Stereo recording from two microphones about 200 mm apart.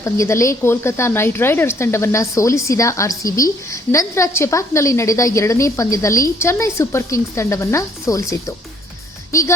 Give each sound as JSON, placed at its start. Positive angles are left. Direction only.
{"t": 0.0, "sound": "speech", "side_deg": 15}